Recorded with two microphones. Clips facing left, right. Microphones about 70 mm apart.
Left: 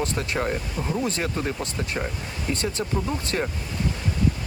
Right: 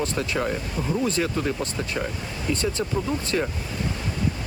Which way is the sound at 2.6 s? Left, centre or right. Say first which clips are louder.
Right 2 dB; right.